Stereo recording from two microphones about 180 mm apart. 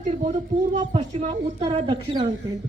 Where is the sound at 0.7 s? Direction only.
40° right (ahead or behind).